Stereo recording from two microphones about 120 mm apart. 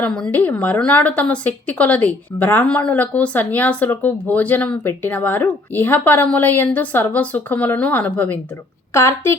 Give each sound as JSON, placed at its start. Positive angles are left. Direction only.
{"t": 0.0, "sound": "a woman's voice", "side_deg": 10}